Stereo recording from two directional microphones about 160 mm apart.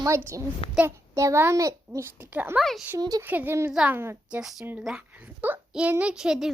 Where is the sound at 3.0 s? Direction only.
25° right (ahead or behind).